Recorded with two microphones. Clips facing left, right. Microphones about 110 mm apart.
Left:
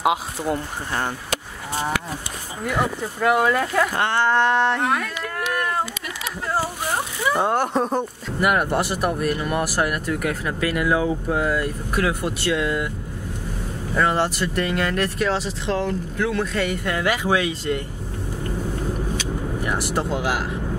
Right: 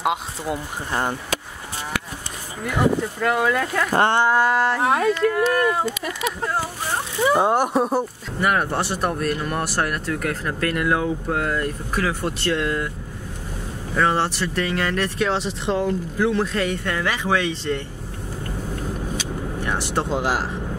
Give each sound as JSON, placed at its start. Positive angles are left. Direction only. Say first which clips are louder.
{"t": 0.0, "sound": "speech", "louder": "left 2 dB", "side_deg": 0}
{"t": 3.2, "sound": "speech", "louder": "left 2 dB", "side_deg": 5}
{"t": 3.9, "sound": "speech", "louder": "right 4 dB", "side_deg": -35}
{"t": 4.2, "sound": "speech", "louder": "even", "side_deg": -5}
{"t": 7.3, "sound": "speech", "louder": "right 1 dB", "side_deg": -15}
{"t": 8.4, "sound": "speech", "louder": "left 1 dB", "side_deg": 5}
{"t": 13.9, "sound": "speech", "louder": "even", "side_deg": 5}
{"t": 19.6, "sound": "speech", "louder": "right 1 dB", "side_deg": 5}